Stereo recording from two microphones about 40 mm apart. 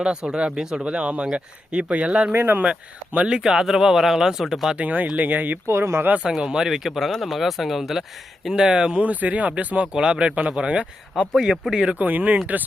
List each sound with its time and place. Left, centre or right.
0.0 s speech: right
0.6 s speech: centre
0.9 s speech: right
2.3 s speech: right
3.2 s speech: centre
4.8 s speech: right
5.6 s speech: right
6.4 s speech: centre
7.2 s speech: centre
9.0 s speech: right
11.3 s speech: centre
11.9 s speech: right